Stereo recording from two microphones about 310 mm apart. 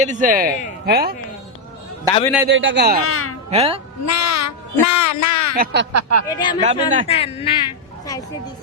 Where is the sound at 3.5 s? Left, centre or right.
Centre.